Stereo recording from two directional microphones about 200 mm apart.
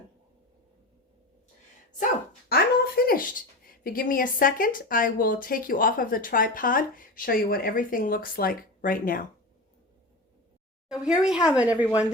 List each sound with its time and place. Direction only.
2.5 s speech: 50° left (ahead or behind)
10.8 s speech: 5° right (ahead or behind)